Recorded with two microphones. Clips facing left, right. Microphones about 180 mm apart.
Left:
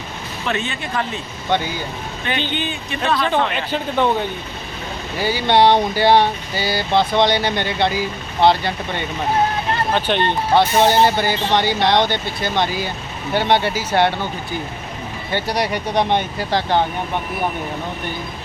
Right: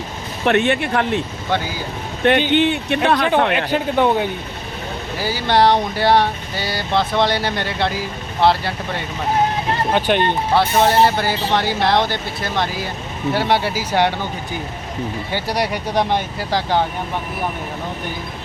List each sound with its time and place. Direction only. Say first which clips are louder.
0.4 s speech: right 8 dB; 65° right (ahead or behind)
1.5 s a sound: left 4 dB; 5° right (ahead or behind)
2.5 s speech: right 9 dB; 70° right (ahead or behind)
3.7 s speech: right 2 dB; 10° right (ahead or behind)
5.1 s a sound: left 2 dB; centre (ahead or behind)
9.9 s speech: right 3 dB; 10° right (ahead or behind)
10.5 s a sound: left 2 dB; centre (ahead or behind)
13.3 s speech: left 2 dB; 5° right (ahead or behind)
15.3 s speech: left 2 dB; 10° right (ahead or behind)